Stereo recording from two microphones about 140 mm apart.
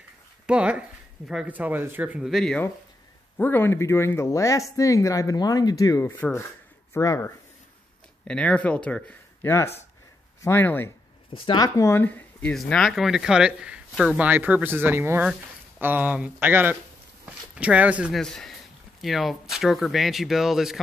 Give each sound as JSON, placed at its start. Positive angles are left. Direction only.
{"t": 0.5, "sound": "speech", "side_deg": -10}
{"t": 3.3, "sound": "speech", "side_deg": 15}
{"t": 8.3, "sound": "speech", "side_deg": 10}
{"t": 11.3, "sound": "speech", "side_deg": 40}
{"t": 11.6, "sound": "speech", "side_deg": 25}
{"t": 18.1, "sound": "speech", "side_deg": 5}